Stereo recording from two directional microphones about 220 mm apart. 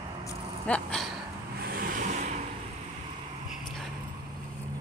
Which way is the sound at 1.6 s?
40° right (ahead or behind).